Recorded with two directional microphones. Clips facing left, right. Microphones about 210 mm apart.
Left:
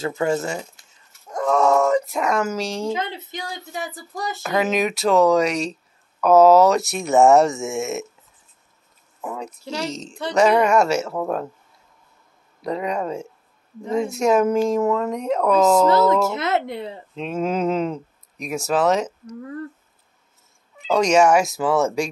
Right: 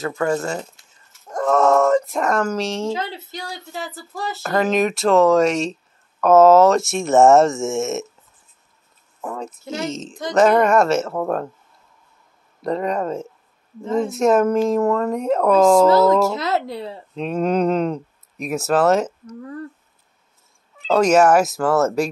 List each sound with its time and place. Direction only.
0.0 s a woman's voice: 20° left (ahead or behind)
1.2 s a sound: centre (ahead or behind)
2.9 s speech: 20° left (ahead or behind)
4.4 s speech: 5° left (ahead or behind)
9.2 s speech: 5° left (ahead or behind)
12.6 s speech: centre (ahead or behind)
16.3 s a woman's voice: 20° left (ahead or behind)
17.1 s speech: centre (ahead or behind)
20.8 s speech: 5° right (ahead or behind)